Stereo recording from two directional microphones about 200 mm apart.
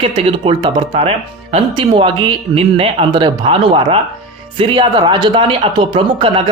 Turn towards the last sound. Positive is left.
turn(degrees=-25)  # may be behind; listen again after turning